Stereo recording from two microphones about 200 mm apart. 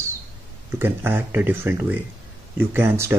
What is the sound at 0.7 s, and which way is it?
Speech, 10° right (ahead or behind).